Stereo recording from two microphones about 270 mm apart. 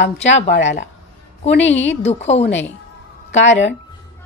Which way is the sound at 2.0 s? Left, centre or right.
Left.